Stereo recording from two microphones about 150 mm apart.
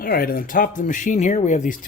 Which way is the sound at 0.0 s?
80° left.